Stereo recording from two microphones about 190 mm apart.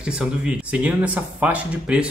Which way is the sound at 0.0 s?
5° right (ahead or behind).